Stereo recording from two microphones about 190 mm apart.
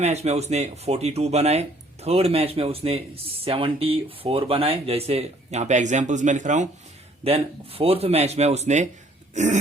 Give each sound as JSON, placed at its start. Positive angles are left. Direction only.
{"t": 0.0, "sound": "speech", "side_deg": -35}
{"t": 9.3, "sound": "throat clearing", "side_deg": -40}